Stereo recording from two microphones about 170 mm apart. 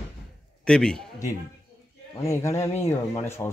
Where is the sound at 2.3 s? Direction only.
15° left (ahead or behind).